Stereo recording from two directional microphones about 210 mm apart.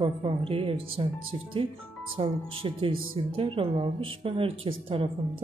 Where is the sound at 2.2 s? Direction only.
25° right (ahead or behind).